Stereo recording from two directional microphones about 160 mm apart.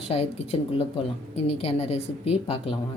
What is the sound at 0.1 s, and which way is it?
A woman's voice, 40° left (ahead or behind).